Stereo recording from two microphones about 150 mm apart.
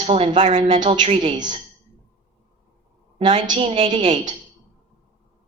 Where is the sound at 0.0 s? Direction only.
40° right (ahead or behind).